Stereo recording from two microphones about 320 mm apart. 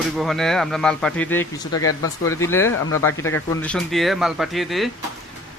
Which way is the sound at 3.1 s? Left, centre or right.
Left.